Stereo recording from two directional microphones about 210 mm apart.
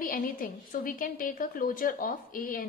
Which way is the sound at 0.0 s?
40° left (ahead or behind).